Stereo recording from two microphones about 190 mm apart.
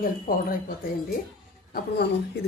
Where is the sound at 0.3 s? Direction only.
50° left (ahead or behind).